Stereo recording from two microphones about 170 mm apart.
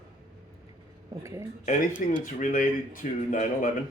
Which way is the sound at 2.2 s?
50° left (ahead or behind).